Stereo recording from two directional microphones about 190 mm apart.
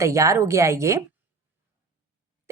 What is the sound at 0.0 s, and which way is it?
Speech, 15° right (ahead or behind).